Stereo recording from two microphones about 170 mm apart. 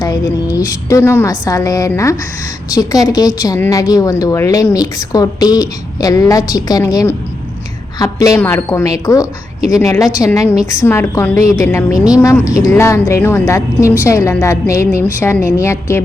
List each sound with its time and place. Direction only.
0.0 s a woman's voice: 20° left (ahead or behind)